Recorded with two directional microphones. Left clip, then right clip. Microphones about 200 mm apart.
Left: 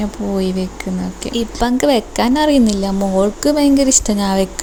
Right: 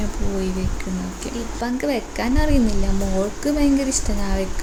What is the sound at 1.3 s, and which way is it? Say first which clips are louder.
Speech: left 10 dB; 40° left (ahead or behind).